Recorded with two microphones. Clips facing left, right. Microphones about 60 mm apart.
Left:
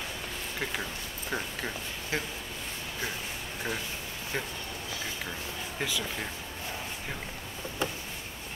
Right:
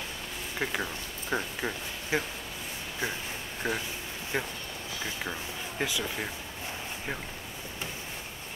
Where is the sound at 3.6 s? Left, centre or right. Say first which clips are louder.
Right 3 dB; centre.